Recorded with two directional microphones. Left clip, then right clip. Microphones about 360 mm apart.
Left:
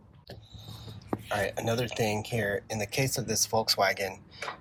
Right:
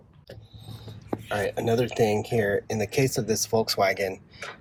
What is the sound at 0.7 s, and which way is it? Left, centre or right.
Filing, centre.